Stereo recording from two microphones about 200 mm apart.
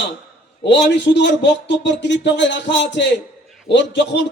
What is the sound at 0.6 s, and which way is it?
A man's voice, 60° left (ahead or behind).